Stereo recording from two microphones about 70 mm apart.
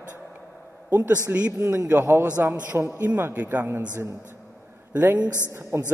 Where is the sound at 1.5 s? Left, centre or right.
Right.